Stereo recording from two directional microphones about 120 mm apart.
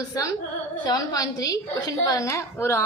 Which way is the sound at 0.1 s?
25° left (ahead or behind).